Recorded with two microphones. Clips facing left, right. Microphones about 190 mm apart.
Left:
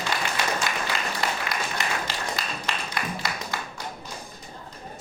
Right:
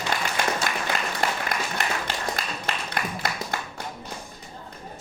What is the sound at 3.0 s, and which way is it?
Music, 50° right (ahead or behind).